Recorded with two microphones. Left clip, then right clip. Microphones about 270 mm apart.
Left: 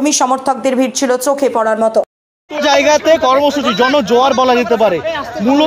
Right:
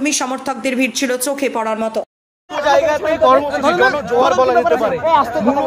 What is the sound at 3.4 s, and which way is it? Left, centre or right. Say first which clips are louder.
Speech: left 1 dB; right.